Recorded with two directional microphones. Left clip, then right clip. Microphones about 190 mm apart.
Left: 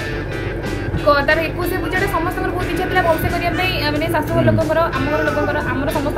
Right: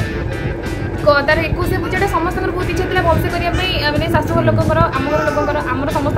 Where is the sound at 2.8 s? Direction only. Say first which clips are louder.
Even; 15° right (ahead or behind).